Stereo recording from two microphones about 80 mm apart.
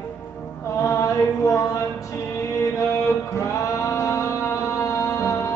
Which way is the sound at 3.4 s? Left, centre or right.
Left.